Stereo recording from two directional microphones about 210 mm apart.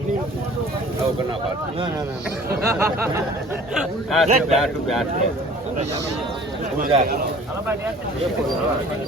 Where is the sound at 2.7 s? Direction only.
15° right (ahead or behind).